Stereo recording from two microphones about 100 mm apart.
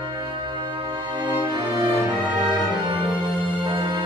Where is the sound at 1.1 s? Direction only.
45° right (ahead or behind).